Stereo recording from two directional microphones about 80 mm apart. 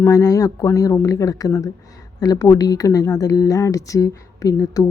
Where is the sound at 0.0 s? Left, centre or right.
Left.